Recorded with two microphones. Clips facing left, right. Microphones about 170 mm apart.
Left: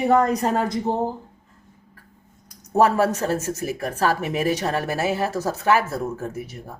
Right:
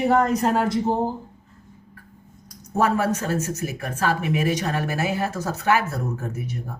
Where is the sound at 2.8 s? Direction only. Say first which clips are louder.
Left 3 dB; 35° left (ahead or behind).